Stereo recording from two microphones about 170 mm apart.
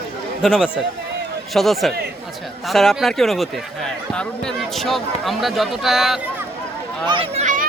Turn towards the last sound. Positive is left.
turn(degrees=-45)  # may be behind; listen again after turning